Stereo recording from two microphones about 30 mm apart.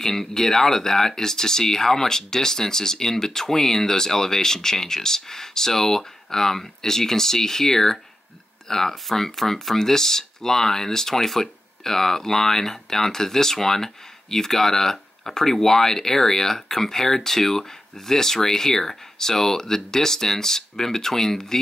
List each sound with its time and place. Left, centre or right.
0.0 s speech: centre